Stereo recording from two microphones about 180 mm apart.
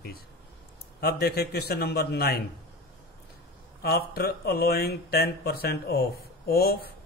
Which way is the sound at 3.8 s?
60° left (ahead or behind).